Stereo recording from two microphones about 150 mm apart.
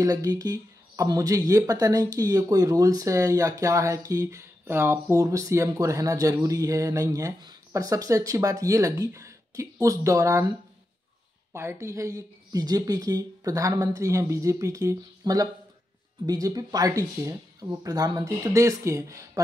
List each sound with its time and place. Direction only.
0.0 s speech: 25° right (ahead or behind)
11.5 s speech: 20° right (ahead or behind)